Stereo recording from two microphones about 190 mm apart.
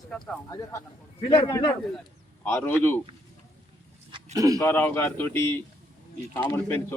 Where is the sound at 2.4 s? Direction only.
10° left (ahead or behind).